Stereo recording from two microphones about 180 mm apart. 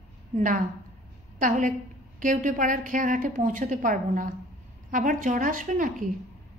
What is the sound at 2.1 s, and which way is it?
A woman's voice, 45° right (ahead or behind).